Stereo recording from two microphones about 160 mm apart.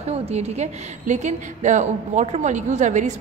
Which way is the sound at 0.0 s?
40° right (ahead or behind).